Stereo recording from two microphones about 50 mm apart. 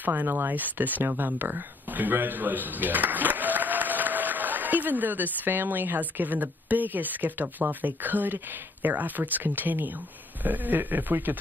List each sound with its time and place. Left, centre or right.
0.0 s a man's voice: right